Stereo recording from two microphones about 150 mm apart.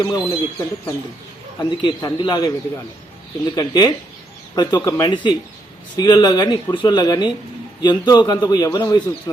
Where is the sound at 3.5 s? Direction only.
25° left (ahead or behind).